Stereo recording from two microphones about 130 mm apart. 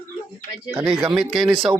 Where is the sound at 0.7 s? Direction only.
15° right (ahead or behind).